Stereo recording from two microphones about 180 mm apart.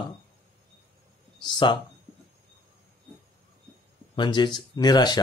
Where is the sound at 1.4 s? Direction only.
25° left (ahead or behind).